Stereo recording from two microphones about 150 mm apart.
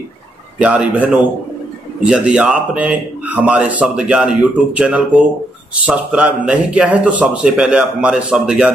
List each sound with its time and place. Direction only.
0.6 s a man's voice: 10° right (ahead or behind)